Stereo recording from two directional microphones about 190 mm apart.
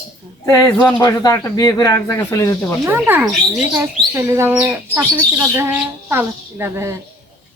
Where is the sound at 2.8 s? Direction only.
10° right (ahead or behind).